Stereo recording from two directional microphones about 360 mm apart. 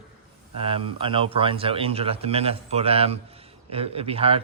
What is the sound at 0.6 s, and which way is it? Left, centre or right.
Speech, centre.